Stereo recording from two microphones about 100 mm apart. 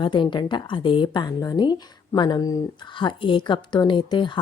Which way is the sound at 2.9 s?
55° left (ahead or behind).